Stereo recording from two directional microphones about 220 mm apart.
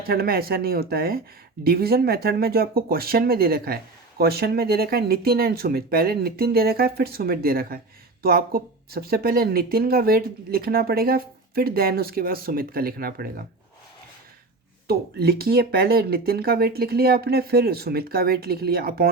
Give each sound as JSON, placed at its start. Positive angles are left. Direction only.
{"t": 0.0, "sound": "speech", "side_deg": -45}
{"t": 14.8, "sound": "speech", "side_deg": -45}